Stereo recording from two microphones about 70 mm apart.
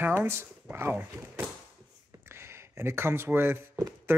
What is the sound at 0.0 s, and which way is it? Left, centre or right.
Speech, right.